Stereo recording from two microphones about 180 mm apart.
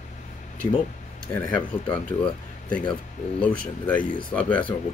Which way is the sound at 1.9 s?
5° left (ahead or behind).